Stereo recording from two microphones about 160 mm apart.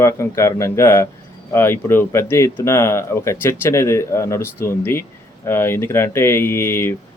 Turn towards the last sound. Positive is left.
turn(degrees=15)  # may be behind; listen again after turning